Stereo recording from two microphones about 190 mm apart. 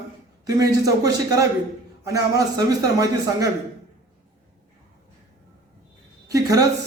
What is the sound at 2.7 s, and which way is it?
Speech, 20° right (ahead or behind).